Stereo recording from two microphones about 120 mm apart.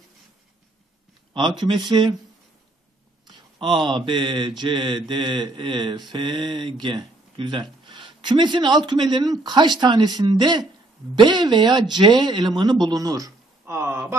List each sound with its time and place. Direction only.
1.6 s speech: 40° right (ahead or behind)
3.3 s speech: 45° right (ahead or behind); by 13.9 s 20° right (ahead or behind)